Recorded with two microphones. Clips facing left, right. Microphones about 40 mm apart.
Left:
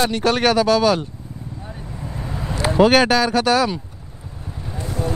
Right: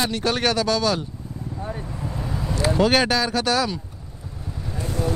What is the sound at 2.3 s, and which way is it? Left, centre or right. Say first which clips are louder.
Vehicle: left 1 dB; centre.